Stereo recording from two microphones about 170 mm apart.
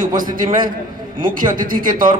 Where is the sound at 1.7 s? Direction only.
55° right (ahead or behind).